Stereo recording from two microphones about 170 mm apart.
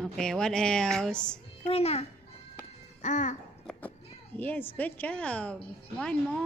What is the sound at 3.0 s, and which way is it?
Speech, 45° left (ahead or behind).